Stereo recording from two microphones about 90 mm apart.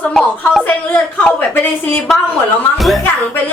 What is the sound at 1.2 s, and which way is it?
Speech, 20° left (ahead or behind).